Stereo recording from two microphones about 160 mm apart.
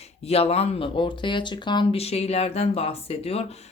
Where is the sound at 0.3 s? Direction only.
40° left (ahead or behind).